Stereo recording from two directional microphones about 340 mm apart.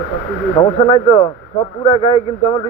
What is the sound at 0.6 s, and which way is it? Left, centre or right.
Speech, centre.